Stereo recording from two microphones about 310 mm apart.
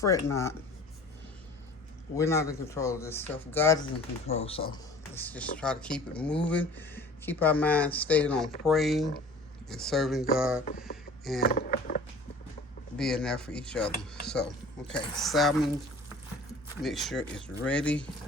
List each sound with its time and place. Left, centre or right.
0.0 s speech: centre
2.1 s speech: centre
4.3 s speech: centre
5.1 s speech: centre
10.7 s speech: left
13.0 s speech: centre
16.8 s speech: centre